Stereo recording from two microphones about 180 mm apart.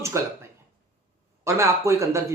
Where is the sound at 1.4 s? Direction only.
15° right (ahead or behind).